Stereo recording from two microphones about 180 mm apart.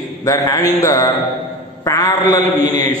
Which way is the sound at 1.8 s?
20° left (ahead or behind).